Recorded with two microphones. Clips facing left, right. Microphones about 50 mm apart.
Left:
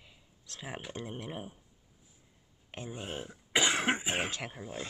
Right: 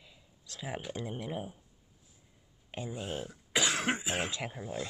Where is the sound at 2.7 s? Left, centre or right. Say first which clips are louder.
Right 2 dB; left.